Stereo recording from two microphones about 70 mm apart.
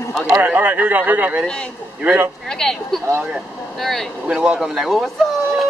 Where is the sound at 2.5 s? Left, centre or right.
Centre.